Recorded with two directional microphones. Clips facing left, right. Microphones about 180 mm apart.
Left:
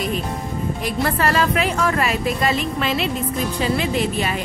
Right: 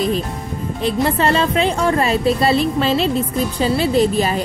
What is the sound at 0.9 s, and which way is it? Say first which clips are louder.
A woman's voice: right 3 dB; 20° right (ahead or behind).